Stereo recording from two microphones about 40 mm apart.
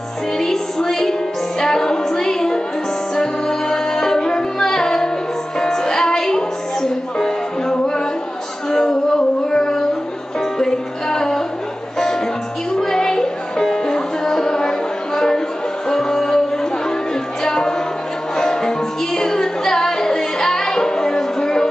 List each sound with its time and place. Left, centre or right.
0.4 s music: centre
7.7 s music: left
8.6 s music: centre
12.7 s music: centre